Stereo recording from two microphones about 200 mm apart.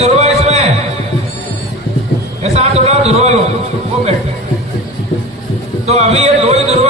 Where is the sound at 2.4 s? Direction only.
30° right (ahead or behind).